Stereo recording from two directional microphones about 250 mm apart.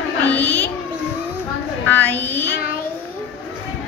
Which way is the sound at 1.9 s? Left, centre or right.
Centre.